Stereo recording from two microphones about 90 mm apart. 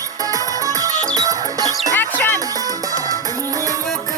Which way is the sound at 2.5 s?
45° right (ahead or behind).